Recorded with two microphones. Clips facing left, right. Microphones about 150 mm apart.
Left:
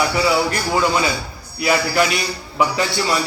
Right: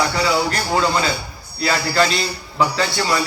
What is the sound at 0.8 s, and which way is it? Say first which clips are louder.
A man's voice: left 1 dB; 15° left (ahead or behind).